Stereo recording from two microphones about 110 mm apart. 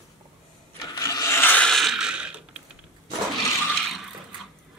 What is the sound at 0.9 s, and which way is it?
Wood, 30° left (ahead or behind).